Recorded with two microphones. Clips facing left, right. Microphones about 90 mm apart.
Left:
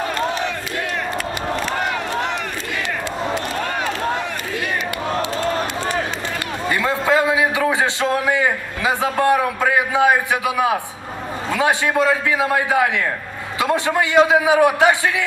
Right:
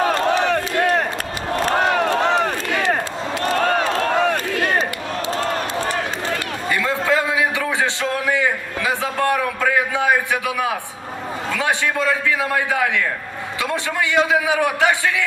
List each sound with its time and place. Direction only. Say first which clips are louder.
0.5 s crowd: right 7 dB; 55° right (ahead or behind)
2.3 s crowd: right 6 dB; 35° right (ahead or behind)
3.3 s crowd: right 3 dB; 90° right
4.2 s a sound: right 6 dB; 55° right (ahead or behind)
6.7 s a sound: left 1 dB; 25° left (ahead or behind)
11.5 s a man's voice: left 4 dB; 20° left (ahead or behind)